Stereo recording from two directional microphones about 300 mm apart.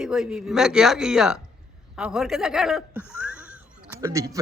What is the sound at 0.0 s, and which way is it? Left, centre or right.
A man's voice, centre.